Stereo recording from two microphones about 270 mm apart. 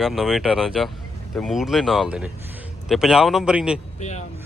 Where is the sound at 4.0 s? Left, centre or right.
Left.